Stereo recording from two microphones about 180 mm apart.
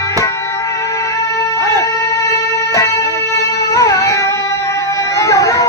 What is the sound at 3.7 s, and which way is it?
Music, 20° left (ahead or behind).